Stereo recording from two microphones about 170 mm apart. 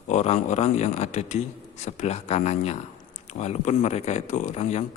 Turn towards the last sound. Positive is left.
turn(degrees=40)  # may be behind; listen again after turning